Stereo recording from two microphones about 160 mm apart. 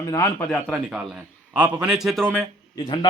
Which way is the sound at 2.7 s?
25° left (ahead or behind).